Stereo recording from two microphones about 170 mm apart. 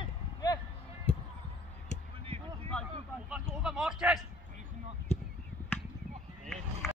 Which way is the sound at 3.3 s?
5° right (ahead or behind).